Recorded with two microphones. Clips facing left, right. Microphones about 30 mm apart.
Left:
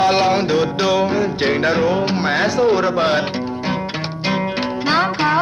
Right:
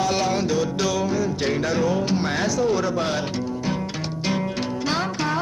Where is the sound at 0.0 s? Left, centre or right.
Left.